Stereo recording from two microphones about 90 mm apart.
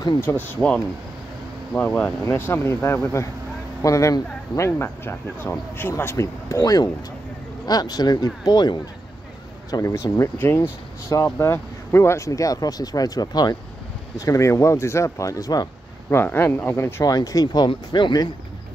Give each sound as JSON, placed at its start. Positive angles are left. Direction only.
{"t": 0.3, "sound": "speech", "side_deg": 35}
{"t": 1.8, "sound": "speech", "side_deg": 15}
{"t": 2.2, "sound": "speech", "side_deg": 25}
{"t": 6.6, "sound": "speech", "side_deg": 45}
{"t": 9.7, "sound": "speech", "side_deg": 40}
{"t": 10.3, "sound": "speech", "side_deg": 25}
{"t": 14.2, "sound": "speech", "side_deg": 35}
{"t": 16.1, "sound": "speech", "side_deg": 25}
{"t": 17.0, "sound": "speech", "side_deg": 40}
{"t": 17.6, "sound": "speech", "side_deg": 60}